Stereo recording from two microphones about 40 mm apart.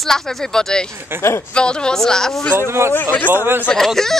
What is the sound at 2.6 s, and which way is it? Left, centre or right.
Speech, right.